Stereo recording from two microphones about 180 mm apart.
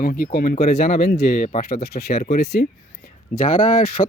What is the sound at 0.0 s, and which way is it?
Speech, 55° left (ahead or behind).